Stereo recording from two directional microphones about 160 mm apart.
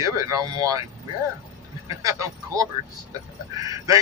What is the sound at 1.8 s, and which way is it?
A man's voice, 20° right (ahead or behind).